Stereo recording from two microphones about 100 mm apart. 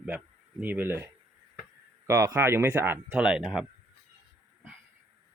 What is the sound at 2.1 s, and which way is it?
Speech, 30° right (ahead or behind).